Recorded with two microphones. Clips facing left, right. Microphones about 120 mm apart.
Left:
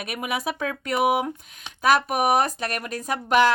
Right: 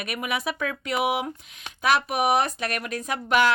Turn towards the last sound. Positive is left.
turn(degrees=40)  # may be behind; listen again after turning